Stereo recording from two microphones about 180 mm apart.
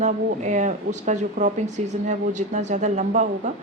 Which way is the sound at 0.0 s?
40° right (ahead or behind).